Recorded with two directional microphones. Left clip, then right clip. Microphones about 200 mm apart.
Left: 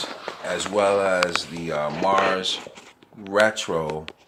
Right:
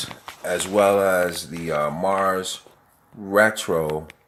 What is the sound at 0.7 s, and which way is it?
Speech, 45° right (ahead or behind).